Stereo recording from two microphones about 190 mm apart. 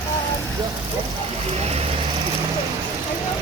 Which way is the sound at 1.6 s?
30° right (ahead or behind).